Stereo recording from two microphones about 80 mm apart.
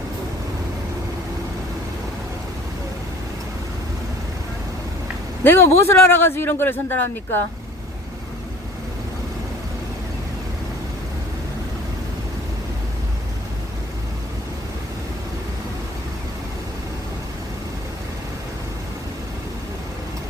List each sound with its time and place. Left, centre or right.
5.4 s a man's voice: left